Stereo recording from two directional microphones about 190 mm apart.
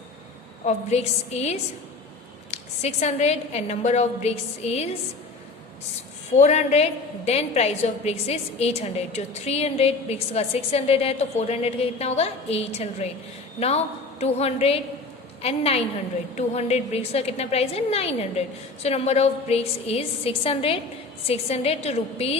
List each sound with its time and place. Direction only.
0.6 s a woman's voice: 35° left (ahead or behind)
6.3 s a woman's voice: 35° left (ahead or behind)